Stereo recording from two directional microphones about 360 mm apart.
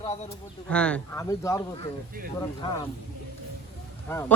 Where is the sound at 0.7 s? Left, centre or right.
Centre.